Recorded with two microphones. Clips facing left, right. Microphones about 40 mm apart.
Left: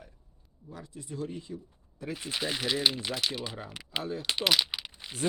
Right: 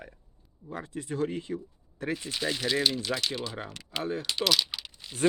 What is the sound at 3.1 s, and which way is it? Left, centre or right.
Speech, centre.